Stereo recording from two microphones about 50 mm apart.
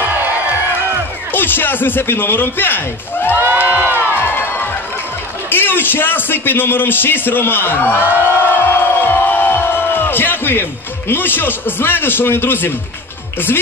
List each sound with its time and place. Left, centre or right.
1.3 s speech: left
3.3 s a sound: right
3.8 s music: right
5.5 s speech: left